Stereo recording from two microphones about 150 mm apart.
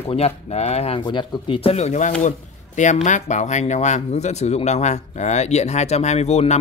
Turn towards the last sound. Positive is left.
turn(degrees=45)  # may be behind; listen again after turning